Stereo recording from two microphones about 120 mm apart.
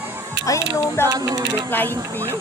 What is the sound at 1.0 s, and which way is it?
Speech, 25° right (ahead or behind).